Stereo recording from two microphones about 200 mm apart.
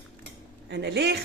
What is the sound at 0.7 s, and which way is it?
Speech, 55° right (ahead or behind).